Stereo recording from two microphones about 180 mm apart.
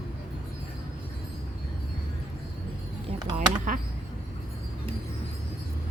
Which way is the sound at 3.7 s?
50° right (ahead or behind).